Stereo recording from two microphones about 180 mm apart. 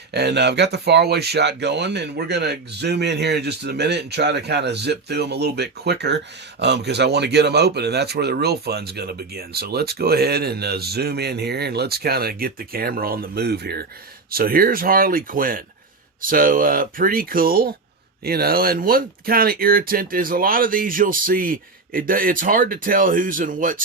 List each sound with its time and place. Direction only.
0.1 s speech: 65° right (ahead or behind); by 23.8 s 50° right (ahead or behind)